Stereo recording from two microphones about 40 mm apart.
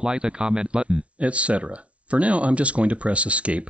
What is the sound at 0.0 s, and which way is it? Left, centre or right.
Speech, right.